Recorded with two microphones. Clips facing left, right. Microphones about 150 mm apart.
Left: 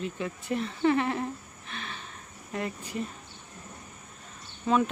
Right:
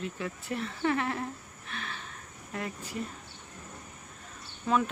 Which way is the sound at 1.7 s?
5° left (ahead or behind).